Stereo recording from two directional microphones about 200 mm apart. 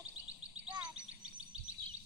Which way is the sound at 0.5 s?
30° right (ahead or behind).